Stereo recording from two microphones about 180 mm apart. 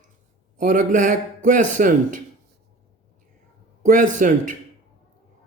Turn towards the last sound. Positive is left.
turn(degrees=-45)  # may be behind; listen again after turning